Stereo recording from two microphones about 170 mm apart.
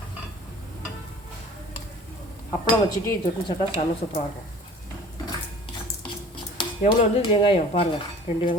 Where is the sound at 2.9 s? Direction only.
25° left (ahead or behind).